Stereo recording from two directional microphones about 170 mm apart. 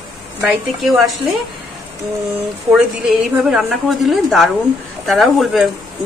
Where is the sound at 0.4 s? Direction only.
Centre (ahead or behind).